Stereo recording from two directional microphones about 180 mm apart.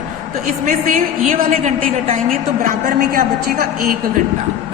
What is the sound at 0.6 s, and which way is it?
A woman's voice, 45° right (ahead or behind).